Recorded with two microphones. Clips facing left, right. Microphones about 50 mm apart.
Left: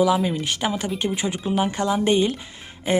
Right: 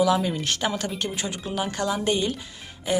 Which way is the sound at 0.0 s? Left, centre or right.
Centre.